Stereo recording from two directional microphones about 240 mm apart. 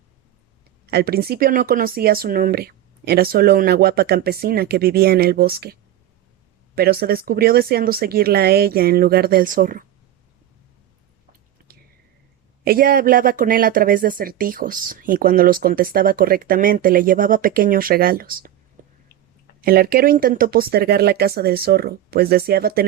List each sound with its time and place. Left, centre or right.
0.9 s speech: right
6.7 s speech: right
12.6 s speech: right
18.8 s a sound: right
19.6 s speech: right